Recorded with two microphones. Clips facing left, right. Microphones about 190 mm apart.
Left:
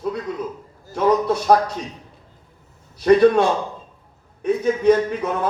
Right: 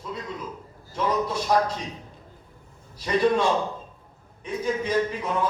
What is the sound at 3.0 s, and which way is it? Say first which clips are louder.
Speech: left 9 dB; 65° left (ahead or behind).